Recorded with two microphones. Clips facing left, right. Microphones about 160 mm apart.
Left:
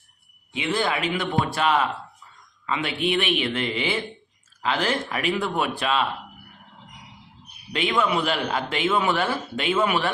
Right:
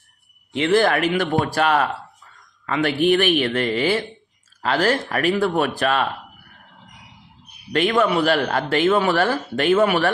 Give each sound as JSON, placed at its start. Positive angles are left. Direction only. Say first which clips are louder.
{"t": 0.5, "sound": "speech", "louder": "right 8 dB", "side_deg": -65}
{"t": 1.3, "sound": "speech", "louder": "right 3 dB", "side_deg": -45}
{"t": 5.8, "sound": "speech", "louder": "right 2 dB", "side_deg": -55}
{"t": 7.7, "sound": "speech", "louder": "right 5 dB", "side_deg": -40}